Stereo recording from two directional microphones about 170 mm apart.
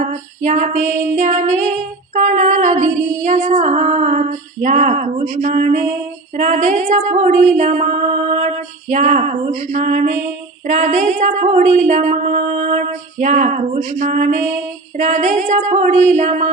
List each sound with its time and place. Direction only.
0.0 s music: 45° right (ahead or behind)